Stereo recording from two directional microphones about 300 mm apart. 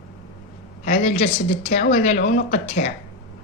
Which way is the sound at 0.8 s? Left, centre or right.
Left.